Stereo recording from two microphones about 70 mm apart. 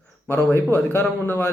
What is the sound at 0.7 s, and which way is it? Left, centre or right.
Speech, left.